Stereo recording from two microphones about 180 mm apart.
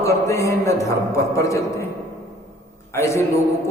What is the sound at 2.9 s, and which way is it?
Speech, 15° left (ahead or behind).